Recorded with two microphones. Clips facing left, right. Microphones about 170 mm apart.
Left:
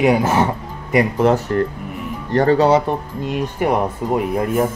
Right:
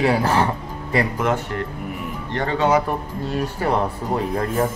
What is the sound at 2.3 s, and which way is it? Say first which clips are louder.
Speech: left 6 dB; 40° left (ahead or behind).